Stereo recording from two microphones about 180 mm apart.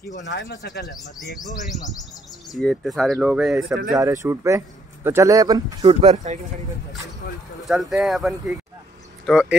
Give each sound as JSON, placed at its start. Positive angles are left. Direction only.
{"t": 0.2, "sound": "speech", "side_deg": 85}
{"t": 2.5, "sound": "speech", "side_deg": 0}
{"t": 3.9, "sound": "speech", "side_deg": -15}
{"t": 5.9, "sound": "speech", "side_deg": -40}
{"t": 7.6, "sound": "speech", "side_deg": 0}